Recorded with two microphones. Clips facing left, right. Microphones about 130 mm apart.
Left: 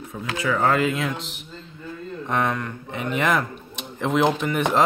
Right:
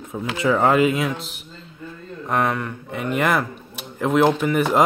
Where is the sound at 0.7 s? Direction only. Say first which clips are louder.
Right 4 dB; 10° right (ahead or behind).